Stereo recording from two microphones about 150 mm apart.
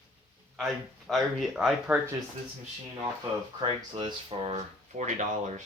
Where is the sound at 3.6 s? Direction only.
35° right (ahead or behind); by 5.6 s 55° right (ahead or behind).